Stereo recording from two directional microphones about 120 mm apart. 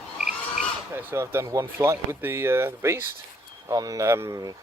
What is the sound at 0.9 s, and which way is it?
Speech, 20° right (ahead or behind).